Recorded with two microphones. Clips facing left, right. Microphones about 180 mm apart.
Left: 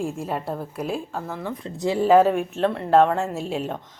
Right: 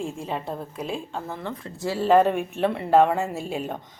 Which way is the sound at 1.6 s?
20° left (ahead or behind).